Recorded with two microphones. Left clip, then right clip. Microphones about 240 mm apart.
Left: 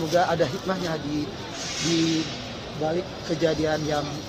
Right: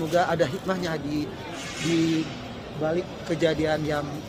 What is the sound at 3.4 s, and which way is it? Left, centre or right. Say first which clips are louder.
Speech: even; centre.